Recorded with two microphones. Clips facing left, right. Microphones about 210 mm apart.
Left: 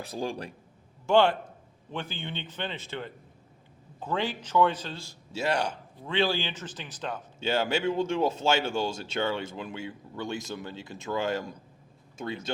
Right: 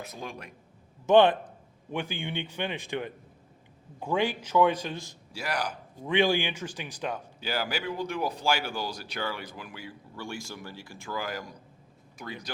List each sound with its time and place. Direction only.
0.0 s speech: 30° left (ahead or behind)
1.0 s speech: 20° right (ahead or behind)
5.3 s speech: 25° left (ahead or behind)
6.1 s speech: 15° right (ahead or behind)
7.3 s speech: 25° left (ahead or behind)